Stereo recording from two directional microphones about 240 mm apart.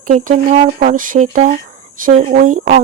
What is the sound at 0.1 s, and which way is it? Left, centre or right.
Speech, right.